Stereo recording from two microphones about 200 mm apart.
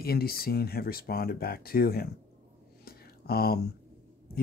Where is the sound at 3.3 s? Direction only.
50° left (ahead or behind).